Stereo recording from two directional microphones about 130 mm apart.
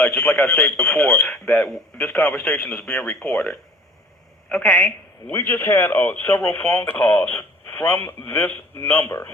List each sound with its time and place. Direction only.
0.0 s speech: 5° left (ahead or behind)
5.3 s speech: 20° left (ahead or behind)